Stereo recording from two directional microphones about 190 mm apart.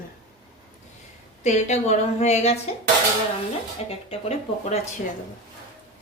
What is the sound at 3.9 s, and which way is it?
Speech, 30° left (ahead or behind).